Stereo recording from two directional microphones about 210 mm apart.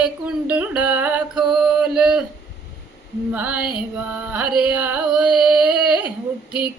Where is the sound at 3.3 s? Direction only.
5° right (ahead or behind).